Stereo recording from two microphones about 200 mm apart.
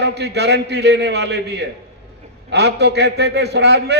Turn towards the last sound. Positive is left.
turn(degrees=-55)  # may be behind; listen again after turning